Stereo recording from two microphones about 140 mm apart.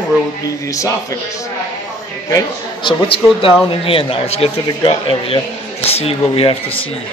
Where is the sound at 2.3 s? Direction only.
35° left (ahead or behind).